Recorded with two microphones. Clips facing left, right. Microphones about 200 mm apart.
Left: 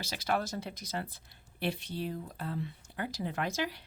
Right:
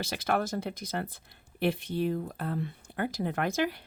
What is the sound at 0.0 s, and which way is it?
Speech, 55° right (ahead or behind).